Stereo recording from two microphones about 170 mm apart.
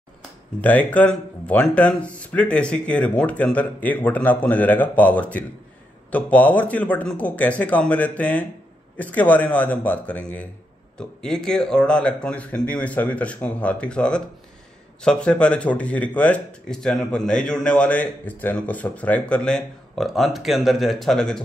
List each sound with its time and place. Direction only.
0.6 s speech: 10° left (ahead or behind)